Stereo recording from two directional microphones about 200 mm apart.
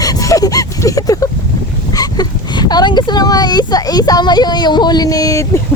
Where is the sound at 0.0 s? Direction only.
15° left (ahead or behind).